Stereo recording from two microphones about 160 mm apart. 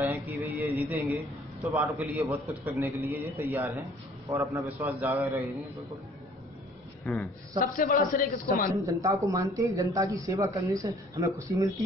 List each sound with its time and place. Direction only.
0.0 s a sound: 15° right (ahead or behind)
1.6 s a man's voice: 15° right (ahead or behind)
7.1 s a woman's voice: centre (ahead or behind)
7.7 s a man's voice: 60° left (ahead or behind)
8.7 s a man's voice: 20° right (ahead or behind)